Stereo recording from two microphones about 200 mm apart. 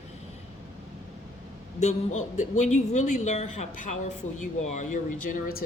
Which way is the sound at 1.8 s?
35° left (ahead or behind).